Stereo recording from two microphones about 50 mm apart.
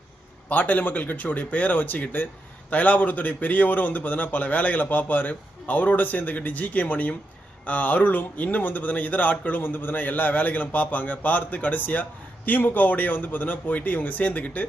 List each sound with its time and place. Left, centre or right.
0.4 s a man's voice: left